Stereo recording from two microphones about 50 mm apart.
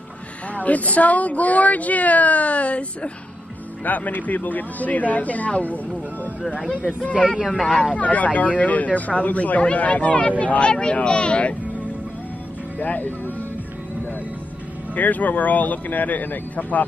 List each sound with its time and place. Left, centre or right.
0.6 s speech: left
7.0 s speech: left
12.7 s speech: left
15.0 s speech: left